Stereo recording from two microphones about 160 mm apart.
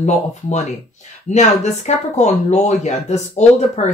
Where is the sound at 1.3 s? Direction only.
45° left (ahead or behind).